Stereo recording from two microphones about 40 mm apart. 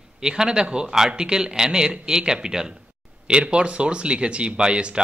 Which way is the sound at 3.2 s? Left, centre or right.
Right.